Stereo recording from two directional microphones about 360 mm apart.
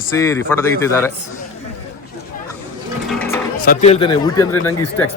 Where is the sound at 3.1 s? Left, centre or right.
Centre.